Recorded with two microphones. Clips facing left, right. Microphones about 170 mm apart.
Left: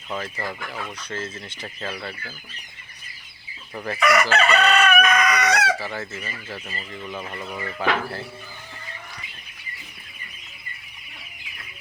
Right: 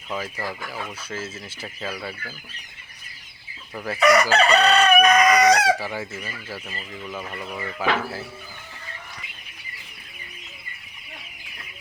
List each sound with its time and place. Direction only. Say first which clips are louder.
0.1 s fowl: even; 5° right (ahead or behind)
3.8 s speech: even; 5° right (ahead or behind)
4.0 s chicken: right 2 dB; 35° right (ahead or behind)
5.8 s speech: right 1 dB; 10° right (ahead or behind)